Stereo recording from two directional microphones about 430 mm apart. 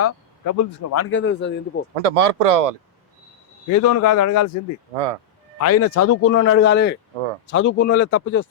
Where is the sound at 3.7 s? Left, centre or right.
Left.